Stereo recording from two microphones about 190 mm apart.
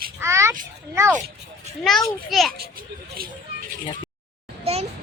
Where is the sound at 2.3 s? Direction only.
Centre (ahead or behind).